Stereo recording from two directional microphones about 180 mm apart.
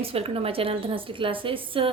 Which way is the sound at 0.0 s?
35° right (ahead or behind).